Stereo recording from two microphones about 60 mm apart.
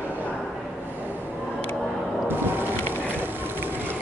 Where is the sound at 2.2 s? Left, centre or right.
Right.